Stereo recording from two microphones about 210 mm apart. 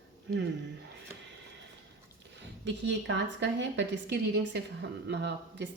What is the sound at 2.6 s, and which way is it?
Speech, 55° right (ahead or behind).